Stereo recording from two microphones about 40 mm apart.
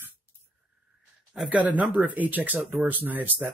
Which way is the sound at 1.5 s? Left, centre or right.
Right.